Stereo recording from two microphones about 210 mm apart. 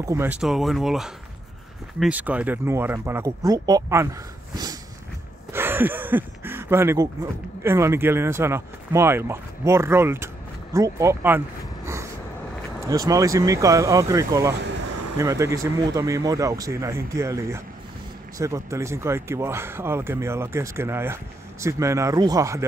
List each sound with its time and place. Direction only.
0.0 s speech: 15° right (ahead or behind)
5.5 s a sound: 10° right (ahead or behind)
7.6 s speech: 10° right (ahead or behind)